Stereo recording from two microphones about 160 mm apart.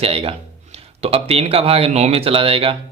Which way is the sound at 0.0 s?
35° right (ahead or behind).